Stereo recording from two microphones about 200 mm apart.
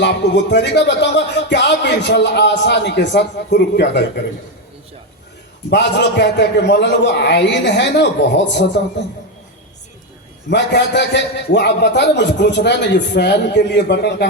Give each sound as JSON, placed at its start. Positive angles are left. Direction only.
{"t": 0.0, "sound": "speech", "side_deg": 60}
{"t": 5.7, "sound": "speech", "side_deg": 60}
{"t": 10.5, "sound": "speech", "side_deg": 60}